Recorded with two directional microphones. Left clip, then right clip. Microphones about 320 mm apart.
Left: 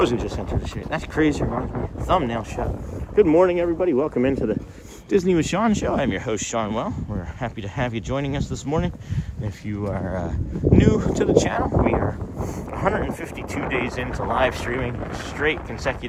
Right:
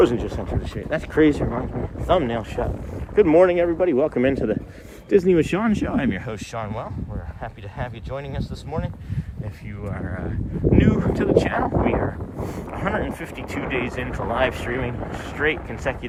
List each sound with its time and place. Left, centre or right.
0.9 s speech: centre
10.2 s speech: centre